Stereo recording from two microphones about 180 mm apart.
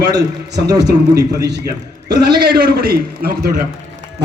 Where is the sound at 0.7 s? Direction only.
20° right (ahead or behind).